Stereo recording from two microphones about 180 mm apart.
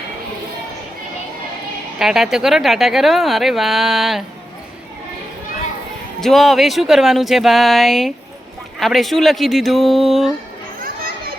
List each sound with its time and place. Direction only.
2.0 s speech: centre (ahead or behind)
6.1 s speech: centre (ahead or behind)
11.0 s children playing: 55° right (ahead or behind)